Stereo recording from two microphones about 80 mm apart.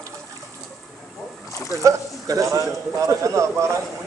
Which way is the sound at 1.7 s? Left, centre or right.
Right.